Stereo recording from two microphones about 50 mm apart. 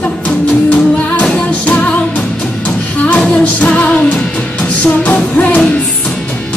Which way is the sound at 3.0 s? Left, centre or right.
Left.